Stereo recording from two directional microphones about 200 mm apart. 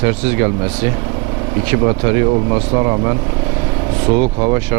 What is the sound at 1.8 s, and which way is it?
Speech, 15° right (ahead or behind).